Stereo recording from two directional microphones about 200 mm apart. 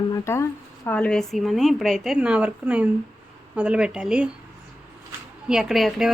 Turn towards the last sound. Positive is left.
turn(degrees=0)  # may be behind; listen again after turning